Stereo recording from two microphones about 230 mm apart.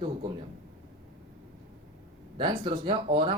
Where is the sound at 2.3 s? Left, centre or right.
Right.